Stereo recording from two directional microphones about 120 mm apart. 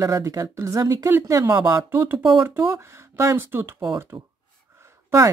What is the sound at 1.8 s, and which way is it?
Speech, 20° right (ahead or behind).